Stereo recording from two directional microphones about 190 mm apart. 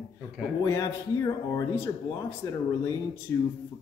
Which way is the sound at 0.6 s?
20° left (ahead or behind).